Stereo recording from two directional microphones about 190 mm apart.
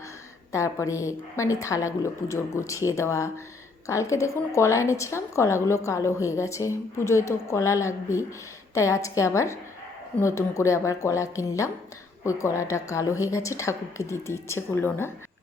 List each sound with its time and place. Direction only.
0.5 s a woman's voice: 15° left (ahead or behind)